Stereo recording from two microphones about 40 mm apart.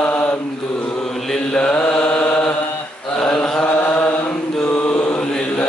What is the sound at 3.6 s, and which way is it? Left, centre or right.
Chant, left.